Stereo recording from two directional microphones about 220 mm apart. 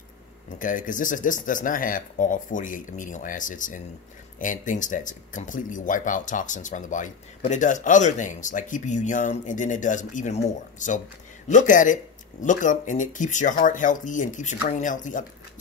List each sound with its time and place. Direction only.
0.6 s speech: 35° left (ahead or behind)